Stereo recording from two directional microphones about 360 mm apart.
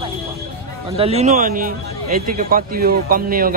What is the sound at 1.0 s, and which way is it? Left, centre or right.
Speech, centre.